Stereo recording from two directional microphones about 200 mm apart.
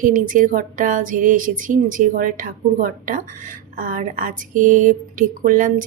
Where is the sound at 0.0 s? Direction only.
40° right (ahead or behind).